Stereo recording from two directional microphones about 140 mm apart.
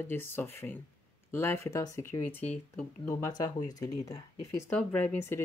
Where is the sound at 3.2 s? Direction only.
25° left (ahead or behind).